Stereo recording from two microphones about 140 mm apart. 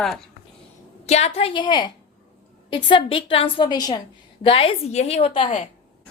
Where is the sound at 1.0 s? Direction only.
50° left (ahead or behind).